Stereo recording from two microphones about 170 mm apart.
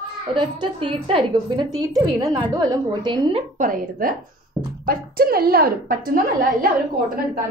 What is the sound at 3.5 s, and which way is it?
A woman's voice, 55° right (ahead or behind).